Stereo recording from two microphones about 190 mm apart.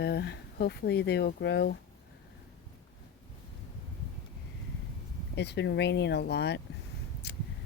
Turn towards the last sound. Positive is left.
turn(degrees=60)  # may be behind; listen again after turning